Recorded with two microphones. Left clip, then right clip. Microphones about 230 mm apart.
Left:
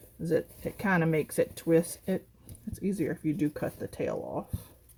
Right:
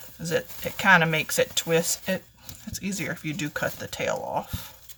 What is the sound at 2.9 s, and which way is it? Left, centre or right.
Speech, right.